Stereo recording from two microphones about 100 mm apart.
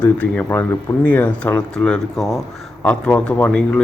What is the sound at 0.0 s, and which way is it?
A man's voice, 15° left (ahead or behind).